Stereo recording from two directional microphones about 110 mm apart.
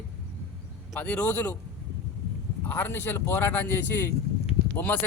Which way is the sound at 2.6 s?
20° left (ahead or behind).